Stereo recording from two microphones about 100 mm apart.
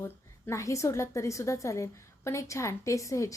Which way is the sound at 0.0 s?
30° left (ahead or behind).